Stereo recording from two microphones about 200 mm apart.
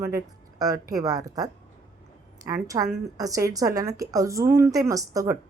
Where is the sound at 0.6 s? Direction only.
20° right (ahead or behind).